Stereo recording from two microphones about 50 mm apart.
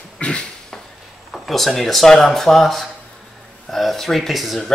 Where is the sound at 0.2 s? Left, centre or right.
Left.